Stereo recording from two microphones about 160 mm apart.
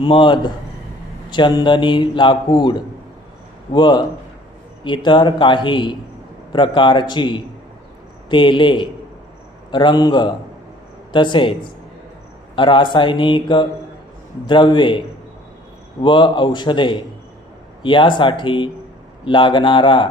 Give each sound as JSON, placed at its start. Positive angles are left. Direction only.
{"t": 0.0, "sound": "a man's voice", "side_deg": 30}